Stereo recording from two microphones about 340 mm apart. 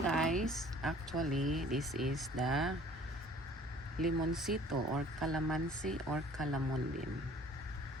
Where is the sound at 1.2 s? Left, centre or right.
Right.